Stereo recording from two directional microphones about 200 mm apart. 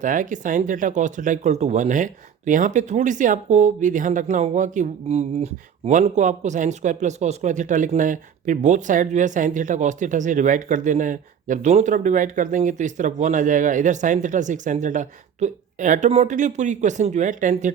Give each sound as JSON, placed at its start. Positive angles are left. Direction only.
{"t": 0.0, "sound": "speech", "side_deg": -40}